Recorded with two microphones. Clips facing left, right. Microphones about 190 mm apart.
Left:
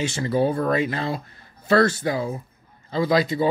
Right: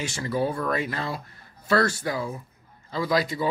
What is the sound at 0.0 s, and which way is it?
Speech, 25° left (ahead or behind).